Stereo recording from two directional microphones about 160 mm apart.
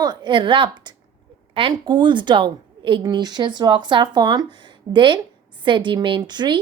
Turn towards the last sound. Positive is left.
turn(degrees=-25)  # may be behind; listen again after turning